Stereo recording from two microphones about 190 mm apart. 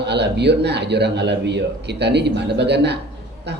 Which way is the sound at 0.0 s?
65° right (ahead or behind).